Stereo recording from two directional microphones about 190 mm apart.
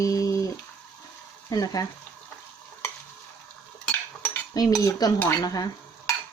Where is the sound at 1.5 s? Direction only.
20° left (ahead or behind).